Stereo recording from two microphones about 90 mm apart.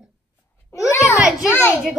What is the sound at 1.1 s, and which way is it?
Speech, 10° right (ahead or behind).